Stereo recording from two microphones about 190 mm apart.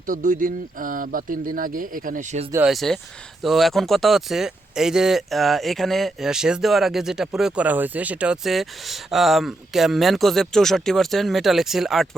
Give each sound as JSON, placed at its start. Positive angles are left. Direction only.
{"t": 0.0, "sound": "speech", "side_deg": -45}
{"t": 2.5, "sound": "speech", "side_deg": -5}